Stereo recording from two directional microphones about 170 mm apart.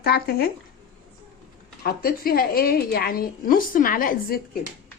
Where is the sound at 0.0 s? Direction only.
70° left (ahead or behind).